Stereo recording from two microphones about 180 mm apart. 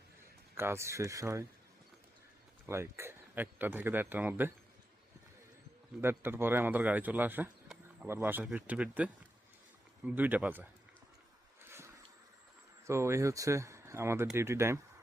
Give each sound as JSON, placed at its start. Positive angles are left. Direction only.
{"t": 0.5, "sound": "speech", "side_deg": -15}
{"t": 2.6, "sound": "speech", "side_deg": -15}
{"t": 6.0, "sound": "speech", "side_deg": -10}
{"t": 10.2, "sound": "speech", "side_deg": -10}
{"t": 12.8, "sound": "speech", "side_deg": -15}